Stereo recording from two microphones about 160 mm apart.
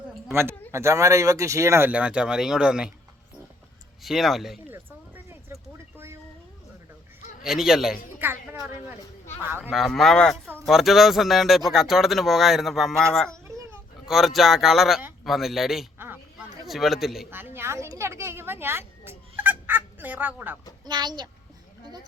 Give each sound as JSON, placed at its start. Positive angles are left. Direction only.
{"t": 0.7, "sound": "speech", "side_deg": -15}
{"t": 4.0, "sound": "speech", "side_deg": 0}
{"t": 4.7, "sound": "a sound", "side_deg": -15}
{"t": 7.4, "sound": "speech", "side_deg": 0}
{"t": 8.2, "sound": "speech", "side_deg": -15}
{"t": 9.4, "sound": "speech", "side_deg": -10}
{"t": 9.7, "sound": "speech", "side_deg": 0}
{"t": 10.4, "sound": "a sound", "side_deg": -15}
{"t": 10.7, "sound": "speech", "side_deg": 0}
{"t": 13.3, "sound": "a sound", "side_deg": -20}
{"t": 14.1, "sound": "speech", "side_deg": 0}
{"t": 17.3, "sound": "a woman's voice", "side_deg": -15}
{"t": 20.8, "sound": "a child's voice", "side_deg": -25}